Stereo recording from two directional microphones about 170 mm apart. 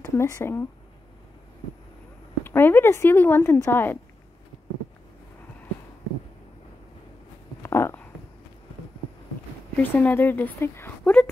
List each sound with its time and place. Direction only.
0.1 s speech: 15° left (ahead or behind)
2.4 s speech: 10° left (ahead or behind)
7.6 s a sound: 15° left (ahead or behind)
9.8 s speech: 10° left (ahead or behind)